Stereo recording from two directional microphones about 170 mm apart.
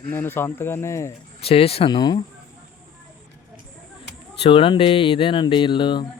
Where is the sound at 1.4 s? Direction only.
35° left (ahead or behind).